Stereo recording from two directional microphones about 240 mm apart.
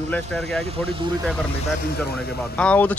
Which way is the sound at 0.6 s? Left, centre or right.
Right.